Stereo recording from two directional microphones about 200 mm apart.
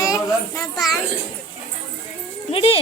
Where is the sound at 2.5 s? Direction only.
30° left (ahead or behind).